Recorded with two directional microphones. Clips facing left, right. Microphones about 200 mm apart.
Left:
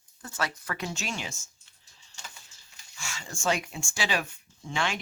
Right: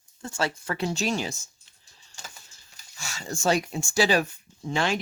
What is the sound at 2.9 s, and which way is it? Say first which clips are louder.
Speech: right 6 dB; 40° right (ahead or behind).